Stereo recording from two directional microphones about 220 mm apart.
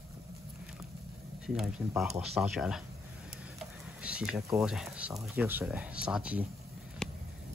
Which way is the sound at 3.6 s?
5° right (ahead or behind).